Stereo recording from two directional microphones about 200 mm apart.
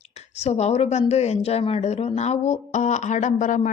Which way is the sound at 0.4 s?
35° left (ahead or behind).